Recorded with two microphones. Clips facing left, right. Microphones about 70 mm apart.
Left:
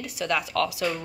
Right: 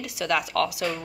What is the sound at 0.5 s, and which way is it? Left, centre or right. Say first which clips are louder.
Speech: even; right.